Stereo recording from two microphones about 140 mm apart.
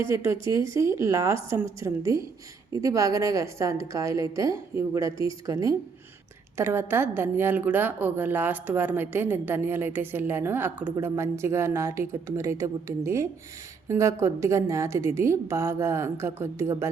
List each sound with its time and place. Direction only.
0.1 s a woman's voice: 20° right (ahead or behind)